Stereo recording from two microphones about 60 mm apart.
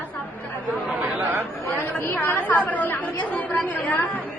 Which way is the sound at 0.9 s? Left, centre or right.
Right.